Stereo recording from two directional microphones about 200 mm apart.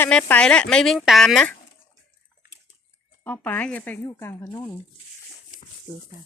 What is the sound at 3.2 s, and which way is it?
Speech, 10° left (ahead or behind).